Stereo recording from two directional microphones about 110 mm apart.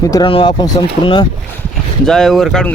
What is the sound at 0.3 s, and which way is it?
Speech, 55° left (ahead or behind).